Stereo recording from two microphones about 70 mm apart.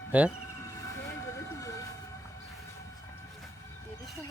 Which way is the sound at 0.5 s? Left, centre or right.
Left.